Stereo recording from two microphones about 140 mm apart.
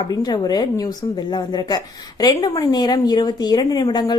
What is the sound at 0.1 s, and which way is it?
A woman's voice, 30° left (ahead or behind).